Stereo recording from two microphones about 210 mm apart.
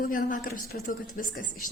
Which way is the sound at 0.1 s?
40° left (ahead or behind).